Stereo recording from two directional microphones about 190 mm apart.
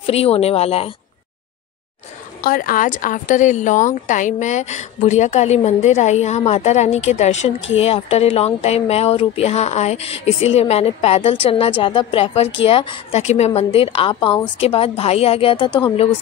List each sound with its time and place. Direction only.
0.0 s a woman's voice: 30° left (ahead or behind)
2.4 s a woman's voice: 50° left (ahead or behind); by 15.7 s 30° left (ahead or behind)